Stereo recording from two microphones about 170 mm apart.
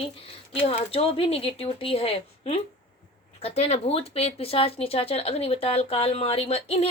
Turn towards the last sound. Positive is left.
turn(degrees=35)  # may be behind; listen again after turning